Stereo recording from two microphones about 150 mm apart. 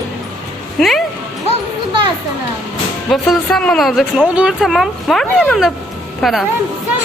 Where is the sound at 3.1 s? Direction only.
Centre (ahead or behind).